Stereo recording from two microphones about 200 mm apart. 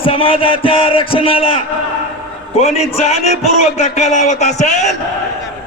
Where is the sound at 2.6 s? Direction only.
30° left (ahead or behind).